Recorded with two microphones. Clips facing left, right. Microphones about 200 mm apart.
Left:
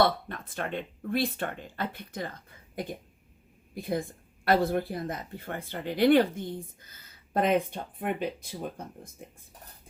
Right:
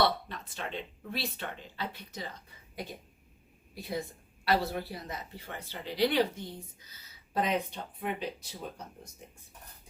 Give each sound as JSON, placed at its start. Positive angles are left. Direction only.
{"t": 0.0, "sound": "speech", "side_deg": 50}
{"t": 3.8, "sound": "speech", "side_deg": 50}